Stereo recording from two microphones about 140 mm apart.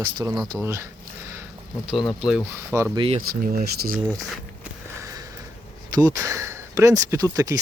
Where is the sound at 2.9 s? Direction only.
40° right (ahead or behind).